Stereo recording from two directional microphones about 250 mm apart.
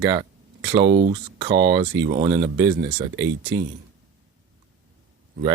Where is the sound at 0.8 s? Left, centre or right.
Right.